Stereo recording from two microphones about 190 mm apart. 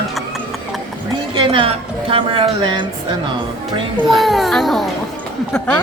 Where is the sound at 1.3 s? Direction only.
30° right (ahead or behind).